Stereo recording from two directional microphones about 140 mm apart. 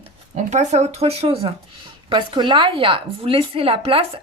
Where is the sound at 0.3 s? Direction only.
55° right (ahead or behind).